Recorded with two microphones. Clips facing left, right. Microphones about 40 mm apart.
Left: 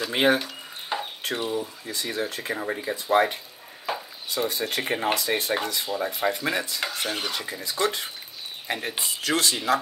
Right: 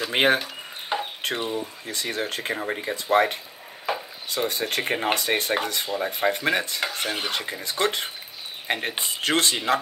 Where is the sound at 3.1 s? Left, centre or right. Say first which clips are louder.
Right 1 dB; right.